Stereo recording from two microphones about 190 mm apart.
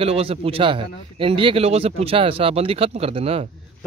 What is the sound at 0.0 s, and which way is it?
Speech, 30° right (ahead or behind).